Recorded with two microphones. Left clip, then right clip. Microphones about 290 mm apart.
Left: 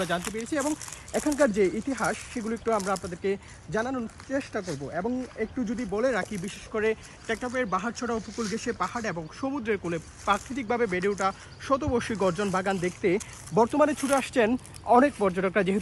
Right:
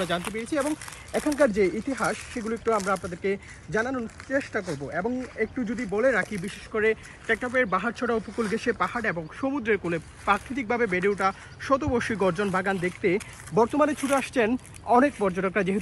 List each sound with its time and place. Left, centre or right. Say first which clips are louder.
0.6 s speech: right 2 dB; centre